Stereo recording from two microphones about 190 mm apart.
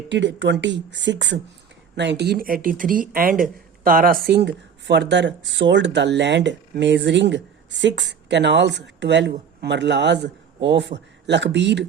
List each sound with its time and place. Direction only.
0.1 s a man's voice: 70° right (ahead or behind)